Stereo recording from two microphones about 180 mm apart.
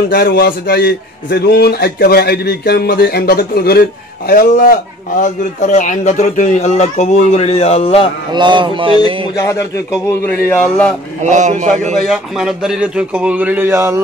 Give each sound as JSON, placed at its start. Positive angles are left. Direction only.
{"t": 0.1, "sound": "a man's voice", "side_deg": 60}
{"t": 8.3, "sound": "speech", "side_deg": -25}
{"t": 9.4, "sound": "a man's voice", "side_deg": 15}
{"t": 11.2, "sound": "a man's voice", "side_deg": -40}
{"t": 12.0, "sound": "a man's voice", "side_deg": 0}